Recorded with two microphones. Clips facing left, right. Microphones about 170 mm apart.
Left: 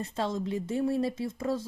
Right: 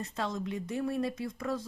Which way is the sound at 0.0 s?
30° left (ahead or behind).